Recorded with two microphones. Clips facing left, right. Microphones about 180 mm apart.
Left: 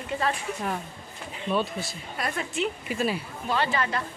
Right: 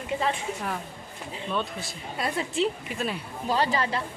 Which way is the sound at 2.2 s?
25° right (ahead or behind).